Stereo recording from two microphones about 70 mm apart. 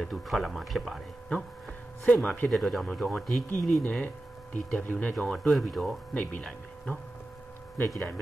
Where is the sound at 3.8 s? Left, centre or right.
Centre.